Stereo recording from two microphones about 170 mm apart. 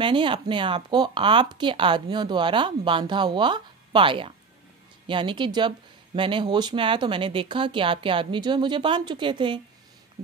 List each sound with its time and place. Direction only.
0.0 s speech: 30° right (ahead or behind)